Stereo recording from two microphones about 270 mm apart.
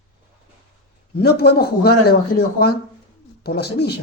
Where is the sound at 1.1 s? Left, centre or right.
Left.